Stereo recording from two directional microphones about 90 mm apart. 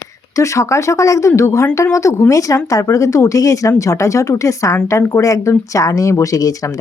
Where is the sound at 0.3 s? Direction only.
35° left (ahead or behind).